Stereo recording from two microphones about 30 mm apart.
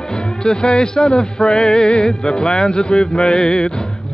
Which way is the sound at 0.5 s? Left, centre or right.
Left.